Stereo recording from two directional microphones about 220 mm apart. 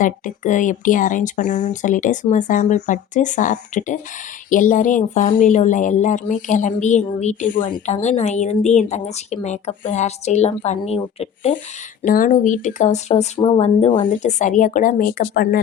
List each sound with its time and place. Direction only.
0.0 s speech: 35° left (ahead or behind)
12.0 s speech: 40° left (ahead or behind)